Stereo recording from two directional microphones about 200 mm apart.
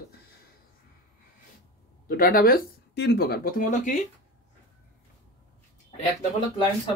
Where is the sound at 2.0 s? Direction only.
45° left (ahead or behind).